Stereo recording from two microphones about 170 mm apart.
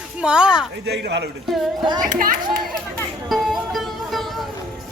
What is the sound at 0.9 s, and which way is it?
Speech, 80° right.